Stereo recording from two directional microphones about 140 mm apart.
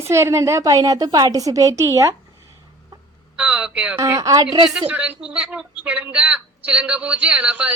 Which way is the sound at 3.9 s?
20° right (ahead or behind).